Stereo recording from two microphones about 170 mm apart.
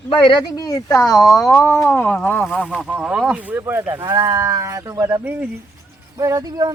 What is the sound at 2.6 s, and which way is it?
Cattle, centre (ahead or behind).